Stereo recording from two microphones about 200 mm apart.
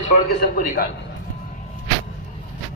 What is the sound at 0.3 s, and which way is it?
Speech, 50° left (ahead or behind).